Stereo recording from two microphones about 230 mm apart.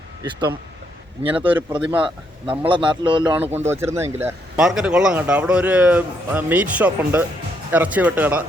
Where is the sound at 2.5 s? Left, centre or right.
Right.